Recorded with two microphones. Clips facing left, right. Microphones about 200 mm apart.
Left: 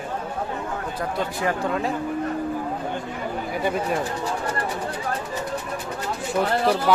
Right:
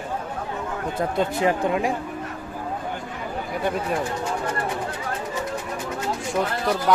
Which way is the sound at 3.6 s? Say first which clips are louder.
Left 1 dB; centre (ahead or behind).